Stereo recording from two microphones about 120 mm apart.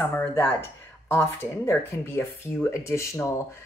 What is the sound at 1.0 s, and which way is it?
Speech, 20° left (ahead or behind).